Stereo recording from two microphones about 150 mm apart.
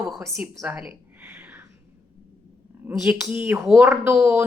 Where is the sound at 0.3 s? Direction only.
5° right (ahead or behind).